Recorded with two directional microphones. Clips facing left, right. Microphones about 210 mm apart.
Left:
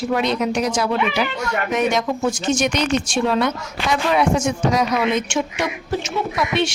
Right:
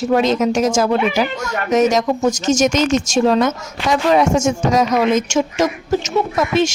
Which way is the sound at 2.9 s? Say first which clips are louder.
Right 4 dB; 40° right (ahead or behind).